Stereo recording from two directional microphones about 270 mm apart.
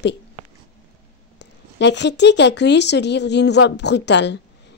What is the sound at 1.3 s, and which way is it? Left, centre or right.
Speech, left.